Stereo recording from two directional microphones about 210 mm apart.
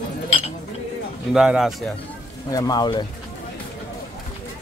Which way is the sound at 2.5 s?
20° left (ahead or behind).